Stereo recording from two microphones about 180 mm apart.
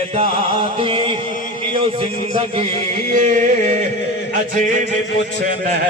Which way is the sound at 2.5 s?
35° right (ahead or behind).